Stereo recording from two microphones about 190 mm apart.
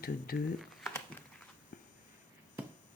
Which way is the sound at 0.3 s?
50° left (ahead or behind).